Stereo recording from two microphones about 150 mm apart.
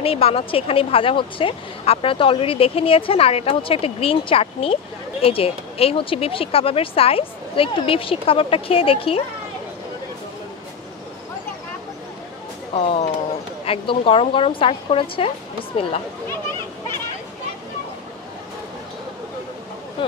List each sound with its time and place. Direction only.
0.0 s a woman's voice: 40° left (ahead or behind)
12.7 s a woman's voice: 40° left (ahead or behind)